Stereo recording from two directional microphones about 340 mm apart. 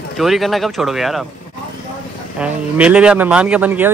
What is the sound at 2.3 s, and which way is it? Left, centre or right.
A man's voice, centre.